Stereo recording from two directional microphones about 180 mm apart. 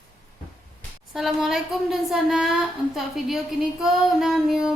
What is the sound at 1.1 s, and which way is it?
A woman's voice, centre (ahead or behind).